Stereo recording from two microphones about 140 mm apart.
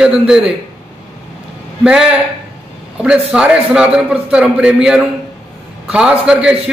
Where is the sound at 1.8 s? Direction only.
5° right (ahead or behind).